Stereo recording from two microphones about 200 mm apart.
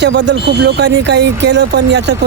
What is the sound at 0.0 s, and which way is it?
Speech, 60° right (ahead or behind).